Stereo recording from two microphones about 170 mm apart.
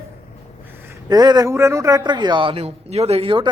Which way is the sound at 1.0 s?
25° right (ahead or behind).